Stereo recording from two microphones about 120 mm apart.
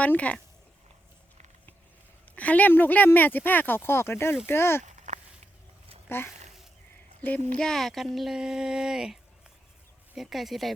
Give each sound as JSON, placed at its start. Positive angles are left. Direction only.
{"t": 0.0, "sound": "speech", "side_deg": 10}
{"t": 2.3, "sound": "speech", "side_deg": 10}
{"t": 4.8, "sound": "a sound", "side_deg": -85}
{"t": 6.1, "sound": "speech", "side_deg": 20}
{"t": 10.2, "sound": "speech", "side_deg": 0}